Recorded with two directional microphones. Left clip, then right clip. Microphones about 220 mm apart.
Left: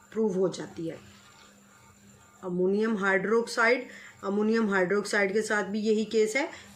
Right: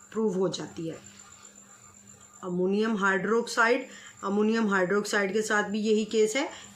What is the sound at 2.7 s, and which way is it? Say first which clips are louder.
Speech: right 2 dB; 30° right (ahead or behind).